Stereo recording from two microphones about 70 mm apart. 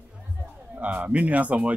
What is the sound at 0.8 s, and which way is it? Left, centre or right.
Speech, centre.